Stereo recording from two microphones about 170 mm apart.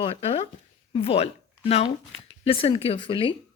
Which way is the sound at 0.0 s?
35° left (ahead or behind).